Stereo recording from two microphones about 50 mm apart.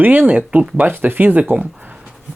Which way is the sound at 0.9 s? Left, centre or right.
Right.